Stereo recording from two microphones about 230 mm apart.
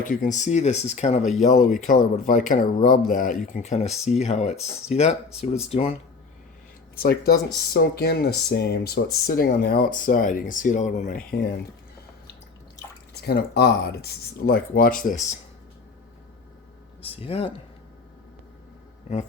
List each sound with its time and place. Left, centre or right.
0.0 s speech: left
6.9 s speech: left
13.2 s speech: left
17.0 s speech: left